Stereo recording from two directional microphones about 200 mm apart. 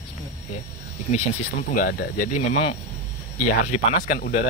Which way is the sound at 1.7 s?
50° left (ahead or behind).